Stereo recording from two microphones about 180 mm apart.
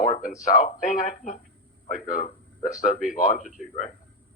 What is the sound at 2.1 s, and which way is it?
Speech, 50° left (ahead or behind).